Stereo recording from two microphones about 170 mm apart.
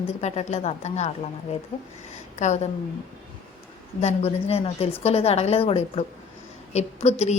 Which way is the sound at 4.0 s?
40° left (ahead or behind).